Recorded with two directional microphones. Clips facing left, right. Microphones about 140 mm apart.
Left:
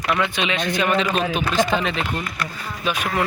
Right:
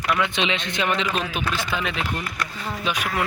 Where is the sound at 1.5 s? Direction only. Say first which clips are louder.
Left 7 dB; 40° left (ahead or behind).